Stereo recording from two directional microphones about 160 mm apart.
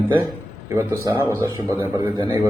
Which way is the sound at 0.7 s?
20° right (ahead or behind).